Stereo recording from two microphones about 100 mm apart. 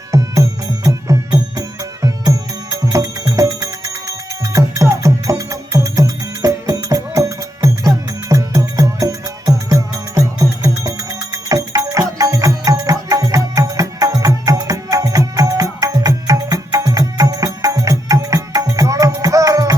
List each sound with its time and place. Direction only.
0.1 s music: 35° right (ahead or behind)